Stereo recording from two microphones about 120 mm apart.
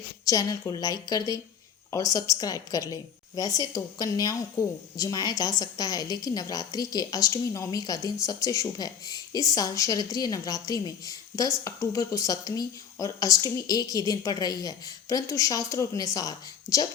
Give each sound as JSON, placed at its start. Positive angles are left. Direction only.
{"t": 0.3, "sound": "a woman's voice", "side_deg": 30}